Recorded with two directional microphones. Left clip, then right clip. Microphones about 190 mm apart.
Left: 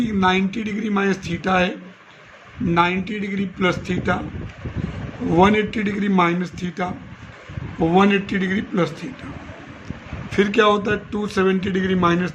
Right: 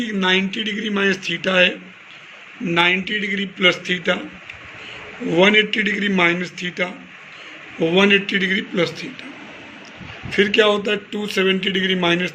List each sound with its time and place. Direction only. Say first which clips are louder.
0.0 s a man's voice: even; 45° left (ahead or behind)
2.7 s a man's voice: right 3 dB; 45° left (ahead or behind)
5.3 s a man's voice: right 2 dB; 45° left (ahead or behind)
10.2 s a man's voice: right 1 dB; 50° left (ahead or behind)